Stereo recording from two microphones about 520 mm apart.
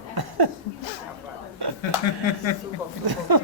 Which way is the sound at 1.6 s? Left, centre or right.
Right.